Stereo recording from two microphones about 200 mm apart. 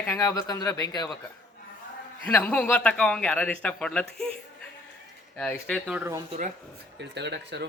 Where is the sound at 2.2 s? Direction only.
5° left (ahead or behind).